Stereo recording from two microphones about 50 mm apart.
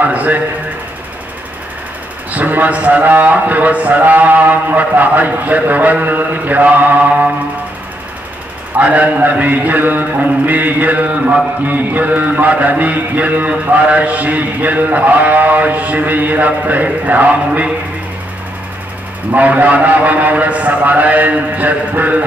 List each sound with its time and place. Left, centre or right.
0.0 s mantra: right
2.3 s mantra: right
8.7 s mantra: right
19.3 s mantra: right